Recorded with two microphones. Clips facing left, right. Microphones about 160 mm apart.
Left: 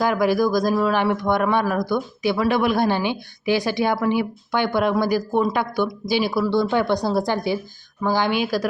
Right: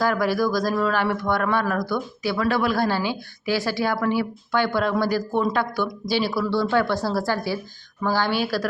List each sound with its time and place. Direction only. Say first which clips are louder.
0.0 s speech: left 3 dB; 15° left (ahead or behind)